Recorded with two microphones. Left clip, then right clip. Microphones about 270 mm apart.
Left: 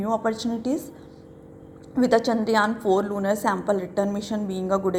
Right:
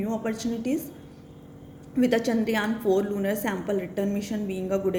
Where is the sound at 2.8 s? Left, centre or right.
Centre.